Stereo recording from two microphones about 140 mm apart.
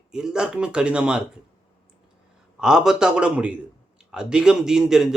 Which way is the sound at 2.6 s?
5° right (ahead or behind).